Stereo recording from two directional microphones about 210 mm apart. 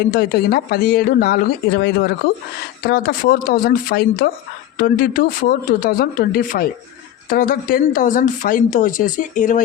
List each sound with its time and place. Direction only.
0.0 s speech: 45° left (ahead or behind)